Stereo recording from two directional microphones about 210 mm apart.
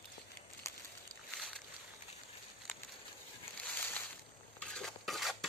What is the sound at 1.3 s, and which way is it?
Boat, centre (ahead or behind).